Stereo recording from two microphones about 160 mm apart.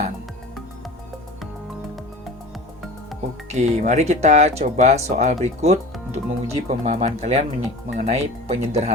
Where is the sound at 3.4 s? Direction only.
45° right (ahead or behind).